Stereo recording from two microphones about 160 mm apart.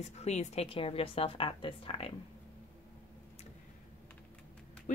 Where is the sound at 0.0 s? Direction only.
45° left (ahead or behind).